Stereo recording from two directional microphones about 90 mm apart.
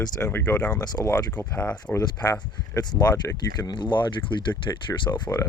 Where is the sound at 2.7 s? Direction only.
45° left (ahead or behind).